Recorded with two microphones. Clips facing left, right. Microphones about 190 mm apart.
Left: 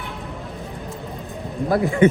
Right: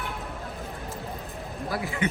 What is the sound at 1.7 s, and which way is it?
Speech, 55° left (ahead or behind).